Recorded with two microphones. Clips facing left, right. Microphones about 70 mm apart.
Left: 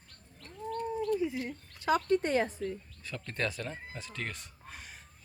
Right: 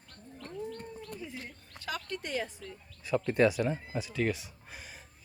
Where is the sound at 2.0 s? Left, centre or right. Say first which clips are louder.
Left 5 dB; left.